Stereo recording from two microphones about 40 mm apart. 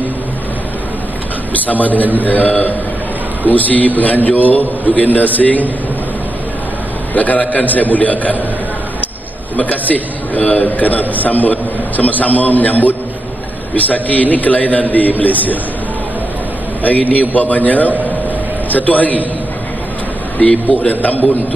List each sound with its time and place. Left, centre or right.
1.7 s a man's voice: left
7.2 s a man's voice: left
9.6 s a man's voice: left
16.8 s a man's voice: left
20.3 s a man's voice: left